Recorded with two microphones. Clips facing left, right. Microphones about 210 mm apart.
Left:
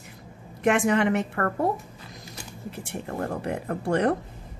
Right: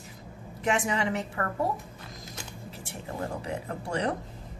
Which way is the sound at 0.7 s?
60° left (ahead or behind).